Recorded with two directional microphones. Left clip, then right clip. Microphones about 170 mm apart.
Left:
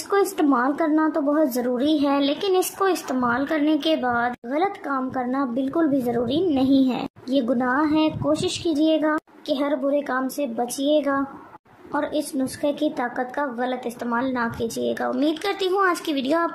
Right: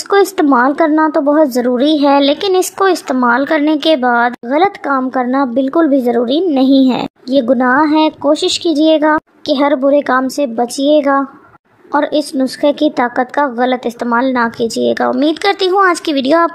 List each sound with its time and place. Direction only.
0.1 s a woman's voice: 45° right (ahead or behind)